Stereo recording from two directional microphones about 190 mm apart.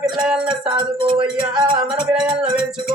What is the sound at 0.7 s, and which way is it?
Music, 25° right (ahead or behind).